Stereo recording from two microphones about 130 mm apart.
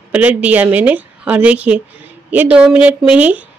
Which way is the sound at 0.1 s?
10° right (ahead or behind).